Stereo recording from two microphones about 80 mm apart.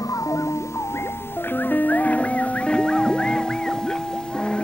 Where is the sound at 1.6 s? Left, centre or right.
Left.